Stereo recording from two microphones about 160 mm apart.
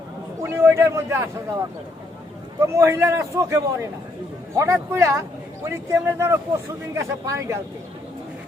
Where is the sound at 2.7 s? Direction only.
15° right (ahead or behind).